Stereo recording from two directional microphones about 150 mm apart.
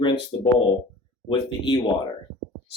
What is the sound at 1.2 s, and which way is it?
Speech, 30° left (ahead or behind).